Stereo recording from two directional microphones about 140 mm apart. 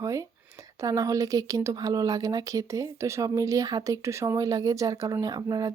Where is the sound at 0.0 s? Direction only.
20° right (ahead or behind).